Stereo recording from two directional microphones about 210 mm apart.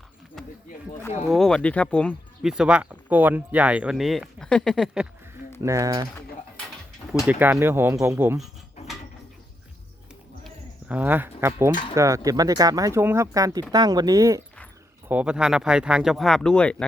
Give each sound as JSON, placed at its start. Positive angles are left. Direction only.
{"t": 0.4, "sound": "a sound", "side_deg": 0}
{"t": 1.3, "sound": "speech", "side_deg": 0}
{"t": 5.6, "sound": "speech", "side_deg": -15}
{"t": 7.3, "sound": "speech", "side_deg": -10}
{"t": 10.4, "sound": "a sound", "side_deg": -5}
{"t": 11.9, "sound": "speech", "side_deg": -15}